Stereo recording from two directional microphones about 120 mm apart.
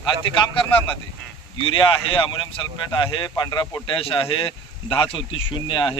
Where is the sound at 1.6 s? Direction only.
45° left (ahead or behind).